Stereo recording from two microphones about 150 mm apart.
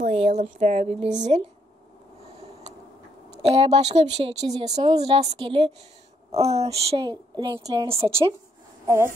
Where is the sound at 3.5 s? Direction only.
45° right (ahead or behind).